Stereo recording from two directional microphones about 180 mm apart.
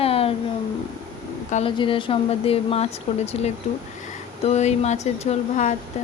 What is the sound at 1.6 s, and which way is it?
Speech, 30° left (ahead or behind).